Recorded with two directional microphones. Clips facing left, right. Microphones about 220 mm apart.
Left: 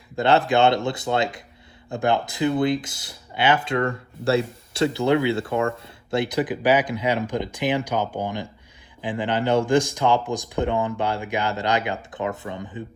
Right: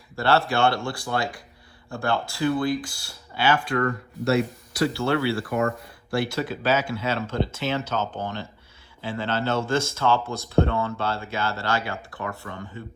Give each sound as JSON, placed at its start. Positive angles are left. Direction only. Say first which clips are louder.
{"t": 0.2, "sound": "speech", "louder": "left 3 dB", "side_deg": 20}